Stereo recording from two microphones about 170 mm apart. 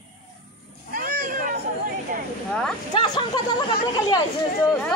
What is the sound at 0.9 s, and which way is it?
Cat, 55° right (ahead or behind).